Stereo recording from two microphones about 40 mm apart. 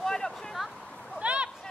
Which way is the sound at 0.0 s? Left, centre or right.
Centre.